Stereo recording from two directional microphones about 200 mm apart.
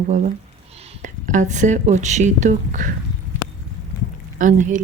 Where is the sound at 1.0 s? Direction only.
40° right (ahead or behind).